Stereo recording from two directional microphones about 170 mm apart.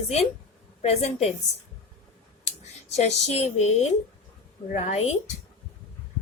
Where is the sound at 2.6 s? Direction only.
40° left (ahead or behind).